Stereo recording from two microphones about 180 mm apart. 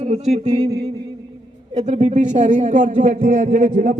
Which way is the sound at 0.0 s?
35° right (ahead or behind).